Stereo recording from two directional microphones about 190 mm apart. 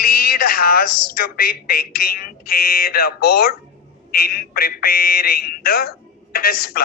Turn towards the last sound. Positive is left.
turn(degrees=50)  # may be behind; listen again after turning